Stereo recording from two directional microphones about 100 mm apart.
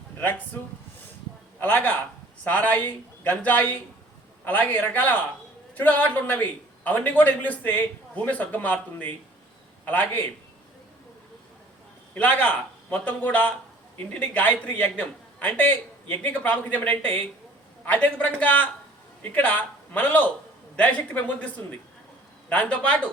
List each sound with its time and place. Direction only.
0.2 s speech: 20° left (ahead or behind)
1.5 s a man's voice: 20° left (ahead or behind)
12.1 s a man's voice: 15° left (ahead or behind)